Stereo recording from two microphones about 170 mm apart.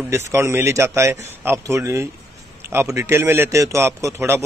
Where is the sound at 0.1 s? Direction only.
15° right (ahead or behind).